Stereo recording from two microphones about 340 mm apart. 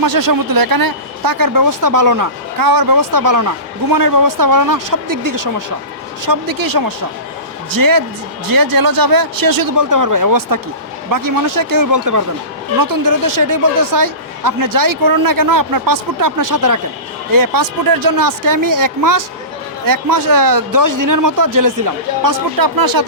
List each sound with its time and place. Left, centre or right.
0.0 s speech: right
17.3 s speech: right